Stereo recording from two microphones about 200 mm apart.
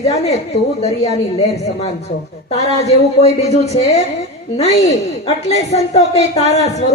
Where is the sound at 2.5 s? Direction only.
30° left (ahead or behind).